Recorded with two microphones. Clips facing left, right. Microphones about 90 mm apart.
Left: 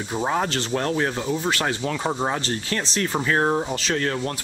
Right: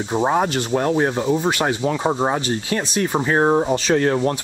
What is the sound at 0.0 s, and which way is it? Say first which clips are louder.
Speech: right 5 dB; 25° right (ahead or behind).